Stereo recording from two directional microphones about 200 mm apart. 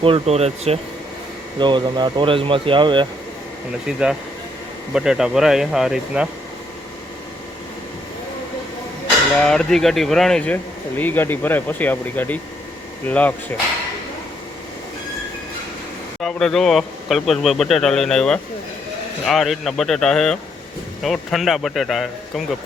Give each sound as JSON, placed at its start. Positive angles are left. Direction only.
{"t": 0.0, "sound": "speech", "side_deg": -30}
{"t": 3.8, "sound": "a man's voice", "side_deg": -5}
{"t": 9.4, "sound": "speech", "side_deg": 5}
{"t": 16.2, "sound": "a man's voice", "side_deg": 0}